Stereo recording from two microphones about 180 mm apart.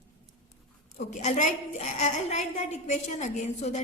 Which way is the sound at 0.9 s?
40° left (ahead or behind).